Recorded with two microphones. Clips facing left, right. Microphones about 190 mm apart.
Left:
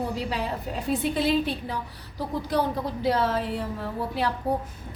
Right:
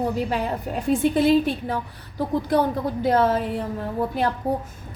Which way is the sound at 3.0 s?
50° right (ahead or behind).